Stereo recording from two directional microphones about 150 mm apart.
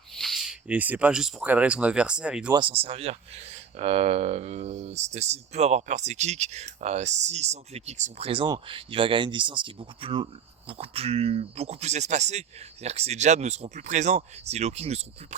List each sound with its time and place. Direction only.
0.2 s speech: centre (ahead or behind)
2.5 s speech: 35° right (ahead or behind)
8.3 s speech: 30° right (ahead or behind)